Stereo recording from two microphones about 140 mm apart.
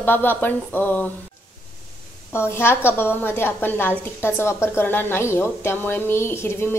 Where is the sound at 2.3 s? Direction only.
15° left (ahead or behind).